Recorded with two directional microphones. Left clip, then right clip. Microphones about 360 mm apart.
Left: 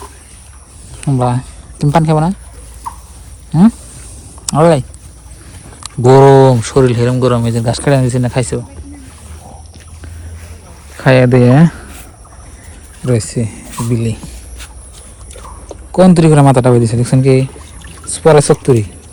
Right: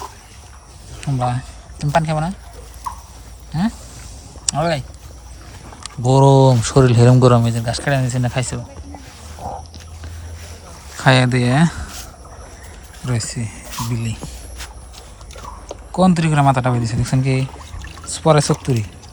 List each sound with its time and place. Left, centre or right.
1.0 s a man's voice: centre
4.5 s a man's voice: centre
10.9 s speech: centre
13.1 s a man's voice: centre
13.4 s speech: right
13.7 s speech: centre
15.9 s a man's voice: centre